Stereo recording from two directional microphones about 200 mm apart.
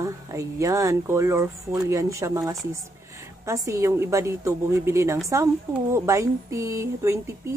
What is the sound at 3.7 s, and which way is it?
A woman's voice, 15° right (ahead or behind).